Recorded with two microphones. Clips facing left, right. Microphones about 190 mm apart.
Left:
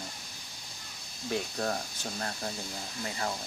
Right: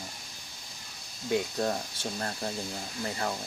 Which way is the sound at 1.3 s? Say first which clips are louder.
Right 4 dB; 20° right (ahead or behind).